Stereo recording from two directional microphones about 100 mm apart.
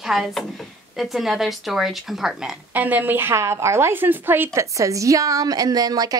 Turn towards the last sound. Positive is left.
turn(degrees=-40)  # may be behind; listen again after turning